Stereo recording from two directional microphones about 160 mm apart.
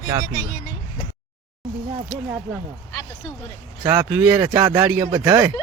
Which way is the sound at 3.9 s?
10° right (ahead or behind).